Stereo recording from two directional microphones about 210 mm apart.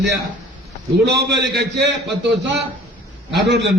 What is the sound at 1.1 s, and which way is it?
Speech, 55° right (ahead or behind).